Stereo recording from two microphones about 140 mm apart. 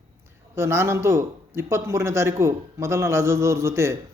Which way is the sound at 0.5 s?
20° right (ahead or behind).